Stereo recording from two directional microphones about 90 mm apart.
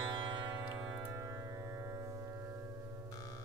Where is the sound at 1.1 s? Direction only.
40° right (ahead or behind).